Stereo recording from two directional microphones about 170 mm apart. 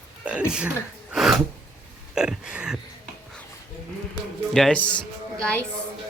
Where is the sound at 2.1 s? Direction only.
5° right (ahead or behind).